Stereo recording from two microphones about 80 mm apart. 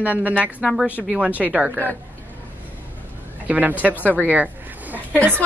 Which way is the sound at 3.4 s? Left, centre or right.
Centre.